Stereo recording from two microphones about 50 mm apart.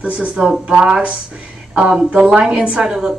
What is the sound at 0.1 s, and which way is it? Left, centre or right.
A woman's voice, right.